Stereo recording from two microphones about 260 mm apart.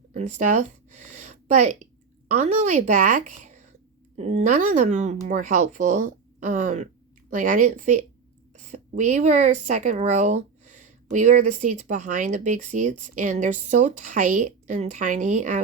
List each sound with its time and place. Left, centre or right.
0.1 s speech: right